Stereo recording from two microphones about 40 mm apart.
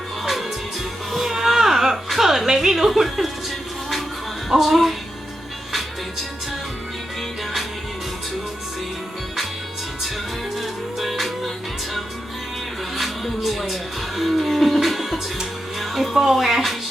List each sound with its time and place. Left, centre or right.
1.1 s a sound: centre
4.4 s music: centre
10.6 s music: centre
13.0 s music: centre
15.8 s speech: centre